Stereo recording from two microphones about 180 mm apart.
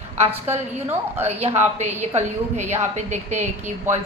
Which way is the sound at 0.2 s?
35° right (ahead or behind).